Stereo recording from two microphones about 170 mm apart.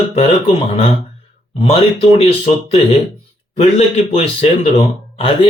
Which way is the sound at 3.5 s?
40° left (ahead or behind).